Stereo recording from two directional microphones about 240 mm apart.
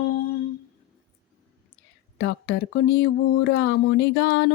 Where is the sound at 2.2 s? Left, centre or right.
Left.